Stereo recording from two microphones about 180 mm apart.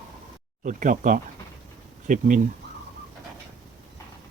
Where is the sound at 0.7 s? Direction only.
45° right (ahead or behind).